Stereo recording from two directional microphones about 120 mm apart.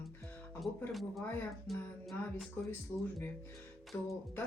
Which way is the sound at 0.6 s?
Centre (ahead or behind).